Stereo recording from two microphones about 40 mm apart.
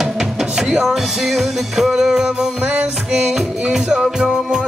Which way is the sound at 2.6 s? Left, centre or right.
Right.